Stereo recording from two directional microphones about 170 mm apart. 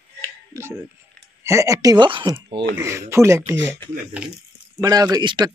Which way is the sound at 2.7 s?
15° right (ahead or behind).